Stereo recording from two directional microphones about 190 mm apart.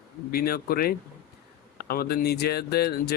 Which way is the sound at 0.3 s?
50° left (ahead or behind).